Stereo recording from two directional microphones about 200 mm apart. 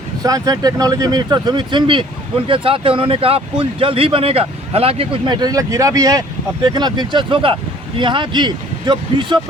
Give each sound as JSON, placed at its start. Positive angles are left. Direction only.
{"t": 0.2, "sound": "speech", "side_deg": -15}